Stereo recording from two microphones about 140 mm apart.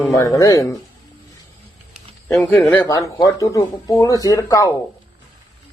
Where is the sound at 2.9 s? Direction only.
20° left (ahead or behind).